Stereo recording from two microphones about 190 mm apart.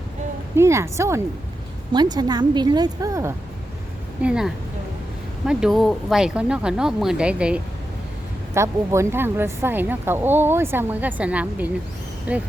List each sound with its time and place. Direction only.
0.5 s a woman's voice: 15° right (ahead or behind)
4.2 s speech: 5° right (ahead or behind)